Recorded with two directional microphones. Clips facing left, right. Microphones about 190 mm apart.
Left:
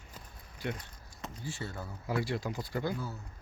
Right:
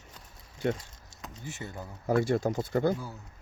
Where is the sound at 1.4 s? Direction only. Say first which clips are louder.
Right 1 dB; 20° right (ahead or behind).